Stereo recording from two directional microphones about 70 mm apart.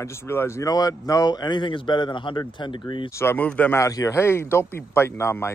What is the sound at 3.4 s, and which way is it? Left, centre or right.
Speech, left.